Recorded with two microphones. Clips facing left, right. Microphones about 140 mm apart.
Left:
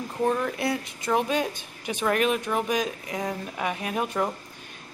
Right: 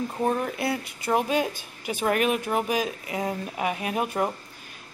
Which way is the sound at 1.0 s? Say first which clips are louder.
Right 1 dB; 5° right (ahead or behind).